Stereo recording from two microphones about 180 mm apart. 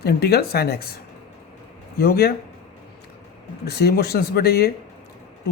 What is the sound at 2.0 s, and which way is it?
Speech, 60° left (ahead or behind).